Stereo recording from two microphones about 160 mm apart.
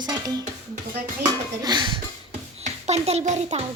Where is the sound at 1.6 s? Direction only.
25° right (ahead or behind).